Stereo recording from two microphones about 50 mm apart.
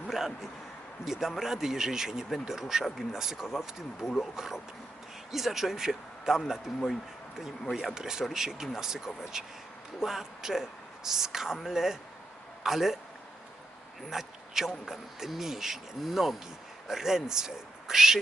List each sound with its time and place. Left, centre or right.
0.1 s a man's voice: centre
1.0 s a man's voice: left
1.4 s speech: centre
7.6 s speech: centre
7.9 s speech: centre
14.1 s speech: centre